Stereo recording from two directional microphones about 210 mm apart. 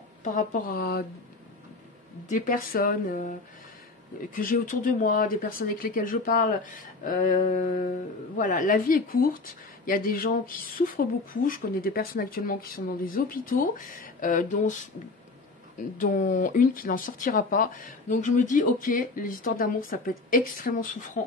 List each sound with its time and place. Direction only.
0.2 s speech: 40° left (ahead or behind)
2.2 s speech: 40° left (ahead or behind)
4.4 s a woman's voice: 40° left (ahead or behind)
16.0 s speech: 40° left (ahead or behind)